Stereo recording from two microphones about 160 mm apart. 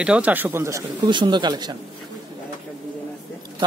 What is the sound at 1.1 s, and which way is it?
Speech, 30° right (ahead or behind).